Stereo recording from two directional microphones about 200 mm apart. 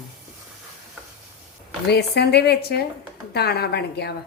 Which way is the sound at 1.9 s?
55° left (ahead or behind).